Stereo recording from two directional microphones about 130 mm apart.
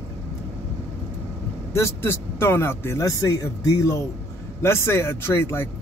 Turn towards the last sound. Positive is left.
turn(degrees=20)  # may be behind; listen again after turning